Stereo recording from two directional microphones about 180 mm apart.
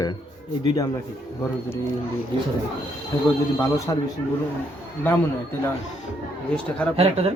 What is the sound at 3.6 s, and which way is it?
Speech, 15° left (ahead or behind).